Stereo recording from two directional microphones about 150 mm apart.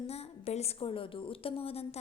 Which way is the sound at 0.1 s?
45° left (ahead or behind).